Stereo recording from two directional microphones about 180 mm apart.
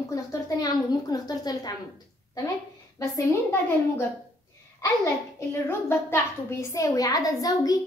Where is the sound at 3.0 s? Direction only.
15° left (ahead or behind).